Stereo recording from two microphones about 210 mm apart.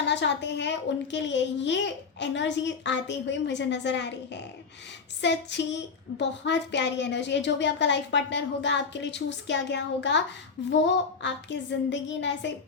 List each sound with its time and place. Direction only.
0.0 s a child's voice: 55° left (ahead or behind)